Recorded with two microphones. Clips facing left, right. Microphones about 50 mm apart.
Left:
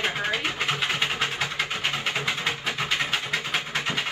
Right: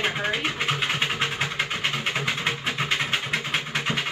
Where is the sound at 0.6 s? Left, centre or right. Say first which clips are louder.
Right 1 dB; right.